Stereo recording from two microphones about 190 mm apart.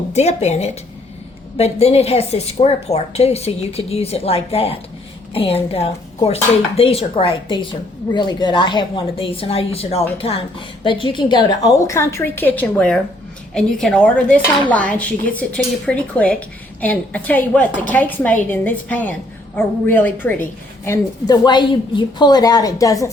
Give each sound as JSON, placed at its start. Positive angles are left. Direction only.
{"t": 0.1, "sound": "a woman's voice", "side_deg": 35}